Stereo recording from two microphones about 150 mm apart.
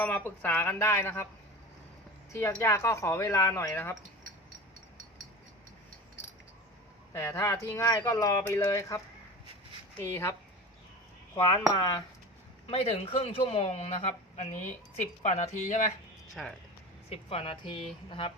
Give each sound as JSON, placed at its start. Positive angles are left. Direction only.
{"t": 0.0, "sound": "speech", "side_deg": 10}
{"t": 2.3, "sound": "speech", "side_deg": 20}
{"t": 7.1, "sound": "speech", "side_deg": 20}
{"t": 10.0, "sound": "speech", "side_deg": 15}
{"t": 11.8, "sound": "speech", "side_deg": 25}
{"t": 12.6, "sound": "a man's voice", "side_deg": 45}
{"t": 16.3, "sound": "speech", "side_deg": 0}
{"t": 17.1, "sound": "speech", "side_deg": 40}